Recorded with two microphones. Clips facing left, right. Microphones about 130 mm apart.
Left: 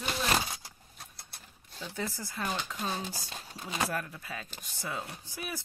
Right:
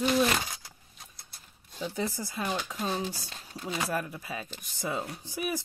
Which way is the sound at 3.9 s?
15° right (ahead or behind).